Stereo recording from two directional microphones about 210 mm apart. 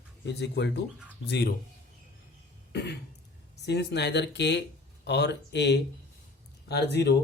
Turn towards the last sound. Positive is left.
turn(degrees=55)  # may be behind; listen again after turning